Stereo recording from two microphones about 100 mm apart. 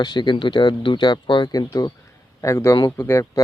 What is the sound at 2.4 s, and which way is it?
Speech, 30° left (ahead or behind).